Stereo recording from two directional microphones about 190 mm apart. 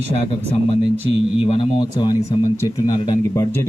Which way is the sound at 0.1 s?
35° left (ahead or behind).